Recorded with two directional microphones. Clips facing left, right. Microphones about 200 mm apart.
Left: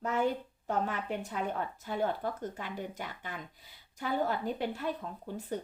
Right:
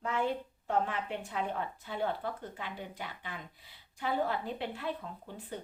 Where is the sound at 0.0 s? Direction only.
40° left (ahead or behind).